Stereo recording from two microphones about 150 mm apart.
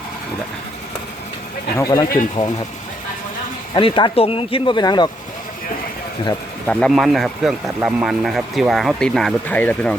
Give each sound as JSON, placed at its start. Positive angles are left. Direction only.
{"t": 1.8, "sound": "speech", "side_deg": 25}
{"t": 3.8, "sound": "speech", "side_deg": 35}
{"t": 6.7, "sound": "speech", "side_deg": 5}